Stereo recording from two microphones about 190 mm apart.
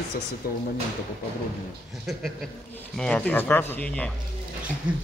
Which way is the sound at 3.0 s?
5° left (ahead or behind).